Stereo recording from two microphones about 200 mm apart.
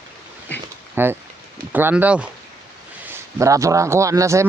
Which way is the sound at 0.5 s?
10° left (ahead or behind).